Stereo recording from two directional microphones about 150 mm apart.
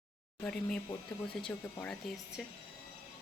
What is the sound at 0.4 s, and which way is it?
Speech, 5° left (ahead or behind).